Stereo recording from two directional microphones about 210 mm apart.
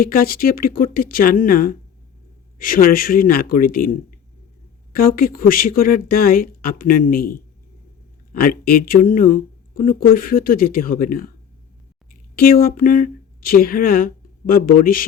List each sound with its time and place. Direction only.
0.0 s speech: 45° left (ahead or behind)
12.4 s speech: 45° left (ahead or behind)